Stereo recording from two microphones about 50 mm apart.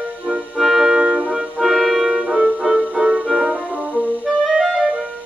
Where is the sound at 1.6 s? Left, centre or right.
Centre.